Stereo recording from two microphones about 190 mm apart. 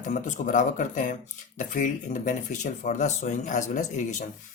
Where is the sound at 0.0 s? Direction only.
40° left (ahead or behind).